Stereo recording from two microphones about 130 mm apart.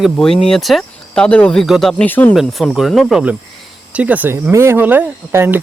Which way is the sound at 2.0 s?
15° left (ahead or behind).